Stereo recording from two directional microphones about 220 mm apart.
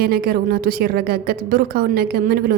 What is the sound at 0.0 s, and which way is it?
A woman's voice, 45° right (ahead or behind).